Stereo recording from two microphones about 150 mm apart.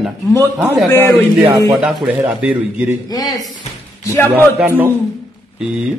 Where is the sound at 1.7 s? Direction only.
Centre (ahead or behind).